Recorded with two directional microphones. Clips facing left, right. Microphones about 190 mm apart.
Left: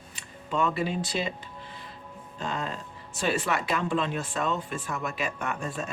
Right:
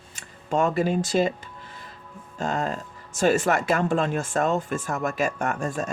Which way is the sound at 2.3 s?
45° right (ahead or behind).